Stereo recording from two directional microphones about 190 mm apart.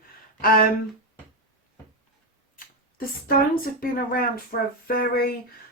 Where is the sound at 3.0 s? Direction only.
50° left (ahead or behind).